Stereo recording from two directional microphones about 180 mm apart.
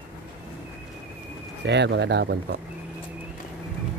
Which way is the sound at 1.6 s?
70° right (ahead or behind).